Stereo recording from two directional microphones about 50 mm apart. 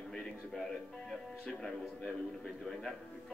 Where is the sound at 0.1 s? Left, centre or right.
Centre.